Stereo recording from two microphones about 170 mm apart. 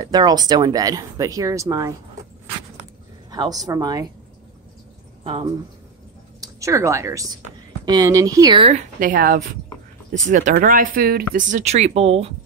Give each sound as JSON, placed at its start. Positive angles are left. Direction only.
{"t": 0.0, "sound": "speech", "side_deg": -25}
{"t": 3.3, "sound": "speech", "side_deg": -20}
{"t": 5.2, "sound": "speech", "side_deg": -30}
{"t": 6.4, "sound": "speech", "side_deg": -20}
{"t": 8.5, "sound": "a woman's voice", "side_deg": -35}
{"t": 9.0, "sound": "a woman's voice", "side_deg": -55}